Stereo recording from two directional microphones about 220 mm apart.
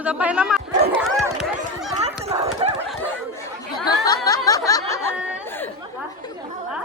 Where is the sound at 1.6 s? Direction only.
30° right (ahead or behind).